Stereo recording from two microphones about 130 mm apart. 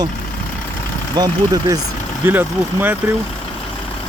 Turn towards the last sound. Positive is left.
turn(degrees=-15)  # may be behind; listen again after turning